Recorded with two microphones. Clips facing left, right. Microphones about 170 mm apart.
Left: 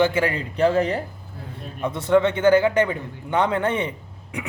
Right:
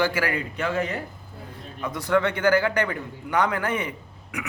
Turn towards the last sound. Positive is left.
turn(degrees=30)  # may be behind; listen again after turning